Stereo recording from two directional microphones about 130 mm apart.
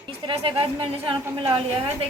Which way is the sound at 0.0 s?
40° right (ahead or behind).